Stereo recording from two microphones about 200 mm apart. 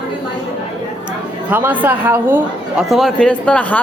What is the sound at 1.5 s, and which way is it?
Speech, 10° right (ahead or behind).